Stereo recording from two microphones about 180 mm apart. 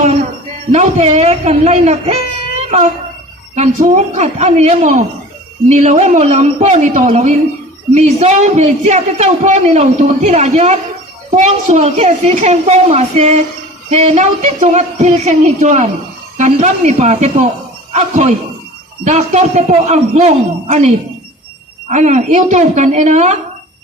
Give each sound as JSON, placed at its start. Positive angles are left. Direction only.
{"t": 0.7, "sound": "speech", "side_deg": -40}